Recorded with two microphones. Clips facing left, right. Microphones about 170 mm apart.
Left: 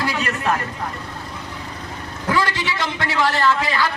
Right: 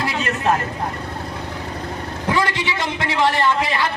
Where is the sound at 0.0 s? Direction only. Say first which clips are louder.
Right 1 dB; 25° right (ahead or behind).